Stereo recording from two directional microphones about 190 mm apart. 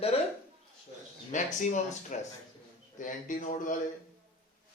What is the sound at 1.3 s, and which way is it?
A man's voice, 40° left (ahead or behind).